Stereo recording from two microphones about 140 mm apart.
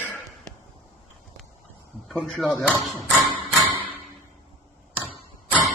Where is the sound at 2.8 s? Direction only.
Centre (ahead or behind).